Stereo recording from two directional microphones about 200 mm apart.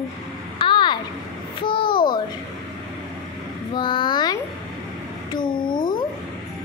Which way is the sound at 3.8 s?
25° left (ahead or behind).